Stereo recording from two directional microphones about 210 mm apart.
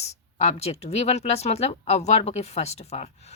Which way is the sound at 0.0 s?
30° left (ahead or behind).